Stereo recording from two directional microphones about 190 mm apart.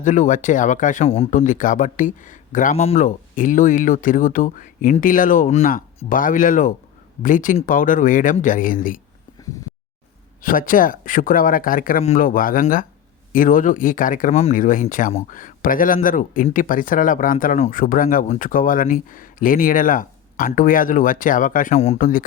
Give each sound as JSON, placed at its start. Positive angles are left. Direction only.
{"t": 0.0, "sound": "speech", "side_deg": 40}
{"t": 1.3, "sound": "speech", "side_deg": 45}
{"t": 10.4, "sound": "speech", "side_deg": 45}